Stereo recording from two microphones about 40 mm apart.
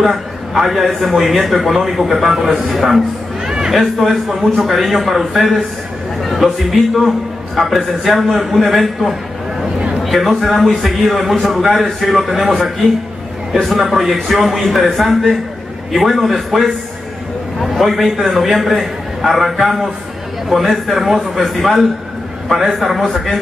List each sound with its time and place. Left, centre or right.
0.0 s a man's voice: centre
3.4 s a sound: centre
3.7 s a man's voice: centre